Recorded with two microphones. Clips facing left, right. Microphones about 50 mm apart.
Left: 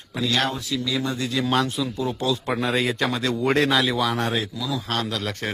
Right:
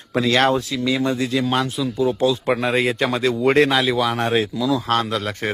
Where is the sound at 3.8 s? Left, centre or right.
Centre.